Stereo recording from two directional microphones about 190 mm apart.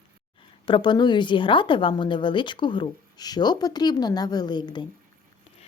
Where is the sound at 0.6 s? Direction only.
25° left (ahead or behind).